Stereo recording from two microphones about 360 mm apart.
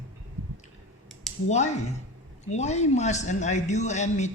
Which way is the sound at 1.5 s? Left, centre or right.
Centre.